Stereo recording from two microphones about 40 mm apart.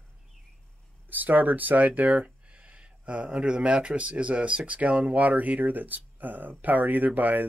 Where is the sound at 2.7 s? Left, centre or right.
Right.